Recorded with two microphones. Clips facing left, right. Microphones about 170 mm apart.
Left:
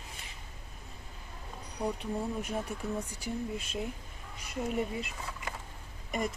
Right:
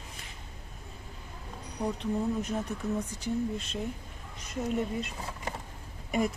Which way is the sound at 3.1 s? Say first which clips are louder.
Right 5 dB; 10° left (ahead or behind).